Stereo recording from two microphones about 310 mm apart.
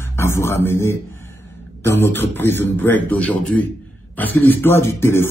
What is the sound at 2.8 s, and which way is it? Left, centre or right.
Speech, centre.